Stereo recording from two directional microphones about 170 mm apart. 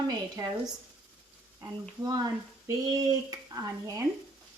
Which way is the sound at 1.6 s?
25° right (ahead or behind).